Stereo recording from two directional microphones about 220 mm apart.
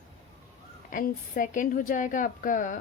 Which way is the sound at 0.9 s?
40° left (ahead or behind).